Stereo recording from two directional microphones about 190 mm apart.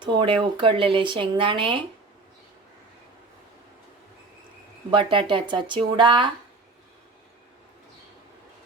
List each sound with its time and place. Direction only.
0.0 s speech: 25° right (ahead or behind)
4.9 s speech: 25° right (ahead or behind)